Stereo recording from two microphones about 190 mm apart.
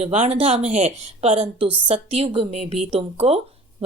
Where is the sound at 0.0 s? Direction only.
30° right (ahead or behind).